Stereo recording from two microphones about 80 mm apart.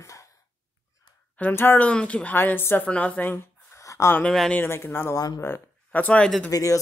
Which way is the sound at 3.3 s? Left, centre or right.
Left.